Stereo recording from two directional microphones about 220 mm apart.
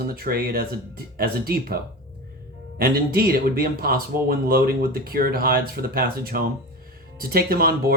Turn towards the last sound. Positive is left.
turn(degrees=-40)  # may be behind; listen again after turning